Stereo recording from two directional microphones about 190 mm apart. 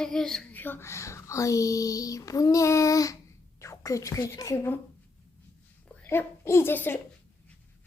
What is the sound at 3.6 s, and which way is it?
Speech, 15° left (ahead or behind).